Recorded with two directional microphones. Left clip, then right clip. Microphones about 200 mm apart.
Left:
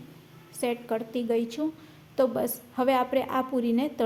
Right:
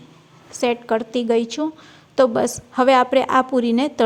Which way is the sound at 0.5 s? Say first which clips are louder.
Right 9 dB; 30° right (ahead or behind).